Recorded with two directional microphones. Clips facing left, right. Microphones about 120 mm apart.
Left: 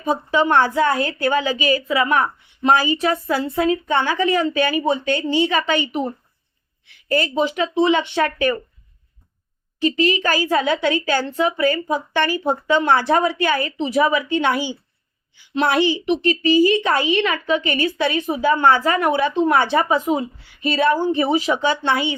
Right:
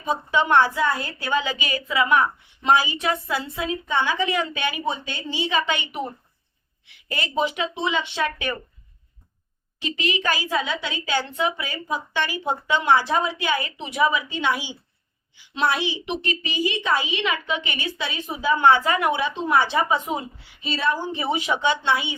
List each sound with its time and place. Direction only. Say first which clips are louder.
0.1 s speech: left 3 dB; 35° left (ahead or behind)
0.7 s a woman's voice: left 6 dB; 65° left (ahead or behind); by 4.8 s 40° left (ahead or behind)
4.9 s a woman's voice: left 9 dB; 60° left (ahead or behind)
5.5 s a woman's voice: left 4 dB; 45° left (ahead or behind)
7.1 s speech: left 5 dB; 35° left (ahead or behind)
9.8 s a woman's voice: left 7 dB; 35° left (ahead or behind)
14.1 s a woman's voice: left 5 dB; 55° left (ahead or behind)
16.2 s speech: left 13 dB; 35° left (ahead or behind)
16.8 s a woman's voice: left 5 dB; 60° left (ahead or behind); by 21.9 s 40° left (ahead or behind)